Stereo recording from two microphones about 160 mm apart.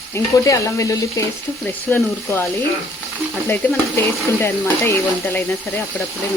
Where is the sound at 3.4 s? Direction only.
15° left (ahead or behind).